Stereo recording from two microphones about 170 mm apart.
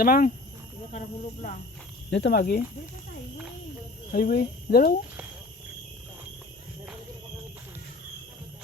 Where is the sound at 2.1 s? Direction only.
90° left; by 2.6 s 65° left (ahead or behind).